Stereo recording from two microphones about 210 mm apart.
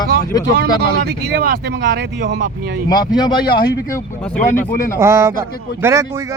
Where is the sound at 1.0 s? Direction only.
50° right (ahead or behind).